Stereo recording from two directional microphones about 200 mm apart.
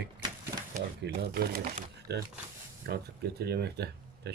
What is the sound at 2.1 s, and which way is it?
Speech, 55° right (ahead or behind).